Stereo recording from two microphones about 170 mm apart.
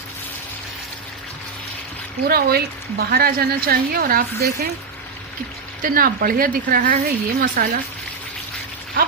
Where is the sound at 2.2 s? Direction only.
65° right (ahead or behind).